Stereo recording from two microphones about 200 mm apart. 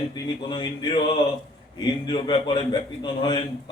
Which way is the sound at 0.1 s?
20° left (ahead or behind).